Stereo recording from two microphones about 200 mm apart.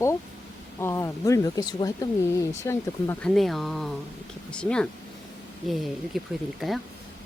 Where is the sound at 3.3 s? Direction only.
Centre (ahead or behind).